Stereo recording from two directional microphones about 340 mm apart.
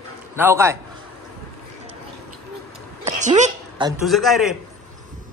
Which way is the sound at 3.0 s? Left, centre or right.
Right.